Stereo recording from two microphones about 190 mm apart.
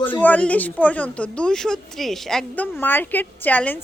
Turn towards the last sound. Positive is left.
turn(degrees=10)  # may be behind; listen again after turning